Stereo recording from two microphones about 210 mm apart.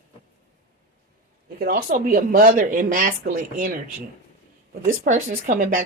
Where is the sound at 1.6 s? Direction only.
45° right (ahead or behind).